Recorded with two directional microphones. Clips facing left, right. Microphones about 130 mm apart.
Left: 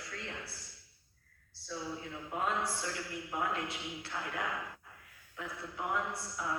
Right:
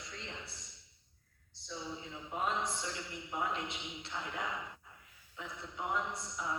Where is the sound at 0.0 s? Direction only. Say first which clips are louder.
Left 3 dB; 20° right (ahead or behind).